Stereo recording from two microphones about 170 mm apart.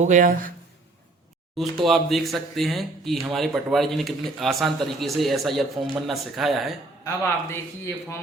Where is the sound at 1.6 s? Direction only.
Centre (ahead or behind).